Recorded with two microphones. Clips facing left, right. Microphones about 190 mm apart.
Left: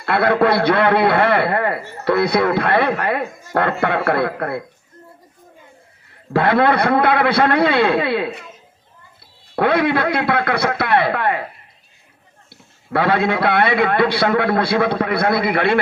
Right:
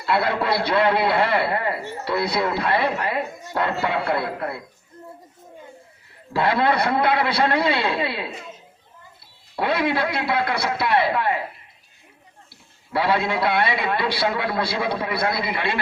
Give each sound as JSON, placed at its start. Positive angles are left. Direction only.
{"t": 0.0, "sound": "a man's voice", "side_deg": 55}
{"t": 6.3, "sound": "a man's voice", "side_deg": 55}
{"t": 9.6, "sound": "a man's voice", "side_deg": 55}
{"t": 12.5, "sound": "a man's voice", "side_deg": 55}